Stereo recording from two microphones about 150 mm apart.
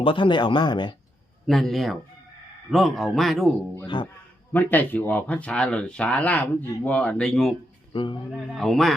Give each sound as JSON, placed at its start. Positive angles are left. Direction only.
{"t": 0.0, "sound": "speech", "side_deg": 35}
{"t": 1.5, "sound": "a man's voice", "side_deg": 0}
{"t": 3.8, "sound": "speech", "side_deg": 30}
{"t": 4.5, "sound": "speech", "side_deg": 10}
{"t": 7.9, "sound": "speech", "side_deg": 35}
{"t": 8.3, "sound": "a man's voice", "side_deg": 0}